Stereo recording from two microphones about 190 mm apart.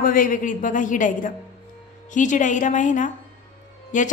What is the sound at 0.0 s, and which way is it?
A woman's voice, 45° left (ahead or behind).